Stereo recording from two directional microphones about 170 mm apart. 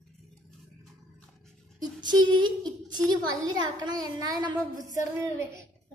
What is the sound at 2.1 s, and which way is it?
A woman's voice, 25° right (ahead or behind).